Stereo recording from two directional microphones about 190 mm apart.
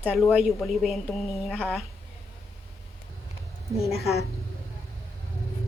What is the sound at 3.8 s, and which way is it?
Speech, centre (ahead or behind).